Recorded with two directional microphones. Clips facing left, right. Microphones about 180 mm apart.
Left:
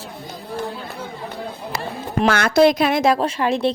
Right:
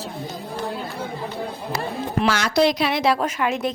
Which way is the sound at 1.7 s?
55° left (ahead or behind).